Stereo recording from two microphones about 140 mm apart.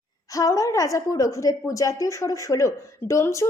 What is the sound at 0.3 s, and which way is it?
A woman's voice, 25° left (ahead or behind).